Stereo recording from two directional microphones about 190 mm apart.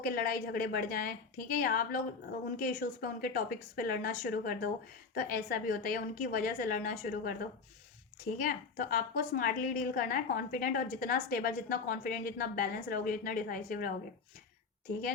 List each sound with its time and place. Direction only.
0.0 s a woman's voice: 50° left (ahead or behind)
8.4 s a woman's voice: 50° left (ahead or behind)